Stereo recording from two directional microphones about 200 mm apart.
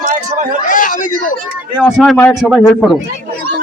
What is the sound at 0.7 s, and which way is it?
Speech, 40° left (ahead or behind).